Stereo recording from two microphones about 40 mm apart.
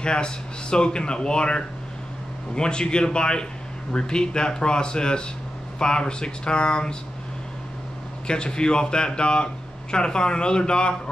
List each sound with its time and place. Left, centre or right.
0.0 s speech: left
8.3 s speech: left